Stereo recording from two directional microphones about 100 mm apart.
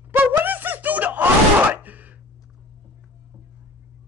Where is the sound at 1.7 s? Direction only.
15° right (ahead or behind).